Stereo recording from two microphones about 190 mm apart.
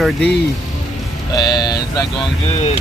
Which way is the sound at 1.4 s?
20° left (ahead or behind).